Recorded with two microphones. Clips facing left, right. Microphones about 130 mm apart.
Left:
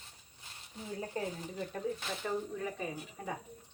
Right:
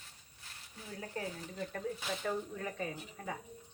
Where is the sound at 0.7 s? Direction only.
25° left (ahead or behind).